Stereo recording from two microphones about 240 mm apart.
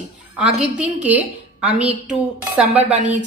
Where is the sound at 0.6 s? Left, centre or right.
Centre.